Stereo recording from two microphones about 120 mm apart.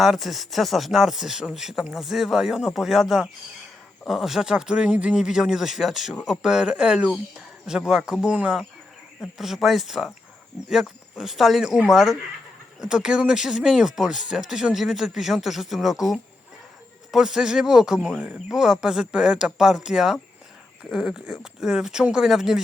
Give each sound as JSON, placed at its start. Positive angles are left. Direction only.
{"t": 0.0, "sound": "speech", "side_deg": 0}